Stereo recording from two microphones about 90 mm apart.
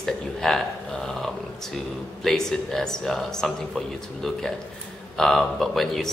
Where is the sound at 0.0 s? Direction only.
5° left (ahead or behind).